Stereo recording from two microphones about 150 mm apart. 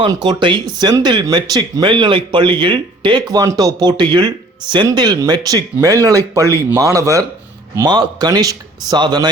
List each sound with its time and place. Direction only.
0.0 s speech: 30° right (ahead or behind)